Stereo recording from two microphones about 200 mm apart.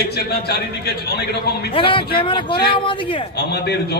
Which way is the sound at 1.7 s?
25° left (ahead or behind).